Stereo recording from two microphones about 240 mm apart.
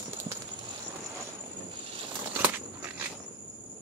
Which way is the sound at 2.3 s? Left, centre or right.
Centre.